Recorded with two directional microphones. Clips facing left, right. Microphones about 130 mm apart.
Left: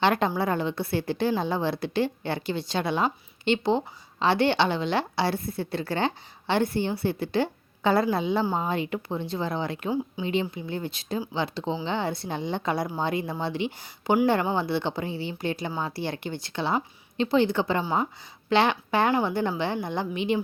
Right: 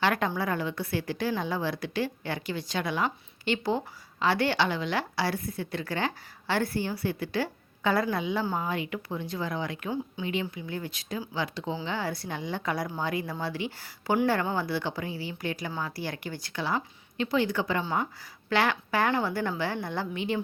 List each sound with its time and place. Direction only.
0.0 s a woman's voice: 25° left (ahead or behind)